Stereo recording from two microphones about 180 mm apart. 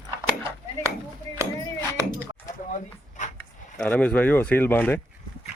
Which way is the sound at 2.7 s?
45° left (ahead or behind).